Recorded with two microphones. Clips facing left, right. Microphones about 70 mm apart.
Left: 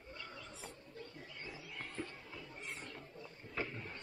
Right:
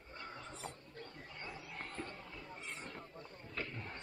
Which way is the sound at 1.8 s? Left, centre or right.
Centre.